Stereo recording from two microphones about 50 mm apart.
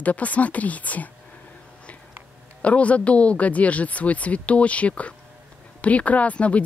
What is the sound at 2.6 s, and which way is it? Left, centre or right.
Speech, left.